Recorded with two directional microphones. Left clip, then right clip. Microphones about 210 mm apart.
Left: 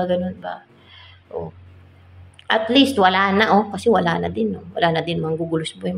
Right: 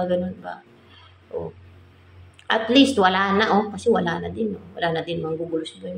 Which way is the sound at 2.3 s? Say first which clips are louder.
Left 1 dB; 5° left (ahead or behind).